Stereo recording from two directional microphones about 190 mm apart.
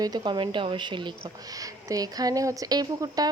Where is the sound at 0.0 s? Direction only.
20° right (ahead or behind).